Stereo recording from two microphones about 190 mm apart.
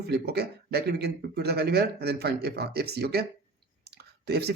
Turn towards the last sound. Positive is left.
turn(degrees=-60)  # may be behind; listen again after turning